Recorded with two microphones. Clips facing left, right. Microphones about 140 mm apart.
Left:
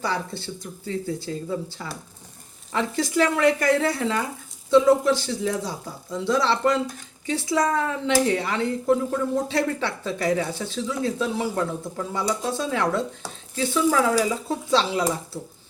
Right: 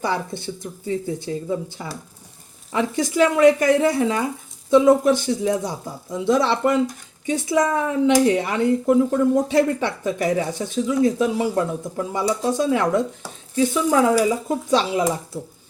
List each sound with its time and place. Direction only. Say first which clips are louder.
0.0 s speech: right 3 dB; 20° right (ahead or behind)